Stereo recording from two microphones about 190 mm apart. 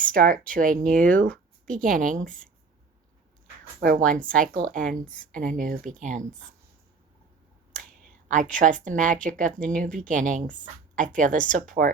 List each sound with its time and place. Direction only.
0.1 s a woman's voice: 45° right (ahead or behind)
0.9 s a woman's voice: 5° left (ahead or behind)
1.3 s a sound: 5° left (ahead or behind)
1.8 s a woman's voice: 45° right (ahead or behind)
3.8 s a woman's voice: 45° right (ahead or behind)
4.7 s a woman's voice: 5° left (ahead or behind)
5.4 s a woman's voice: 45° right (ahead or behind)
8.3 s a woman's voice: 40° right (ahead or behind)